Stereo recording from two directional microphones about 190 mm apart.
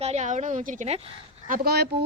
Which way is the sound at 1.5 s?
55° right (ahead or behind).